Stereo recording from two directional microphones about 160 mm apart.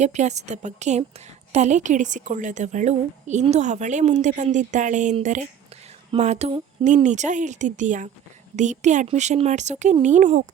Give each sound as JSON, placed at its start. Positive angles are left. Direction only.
{"t": 0.0, "sound": "a woman's voice", "side_deg": -45}